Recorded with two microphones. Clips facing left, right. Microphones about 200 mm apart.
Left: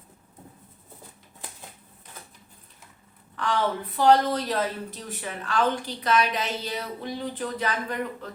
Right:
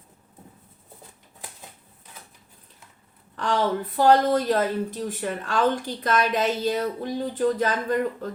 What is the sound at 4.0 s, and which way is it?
A woman's voice, 50° right (ahead or behind).